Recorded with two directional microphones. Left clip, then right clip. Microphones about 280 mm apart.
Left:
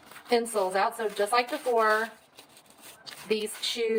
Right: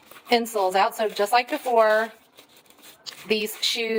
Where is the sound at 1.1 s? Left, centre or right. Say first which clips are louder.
Right 5 dB; right.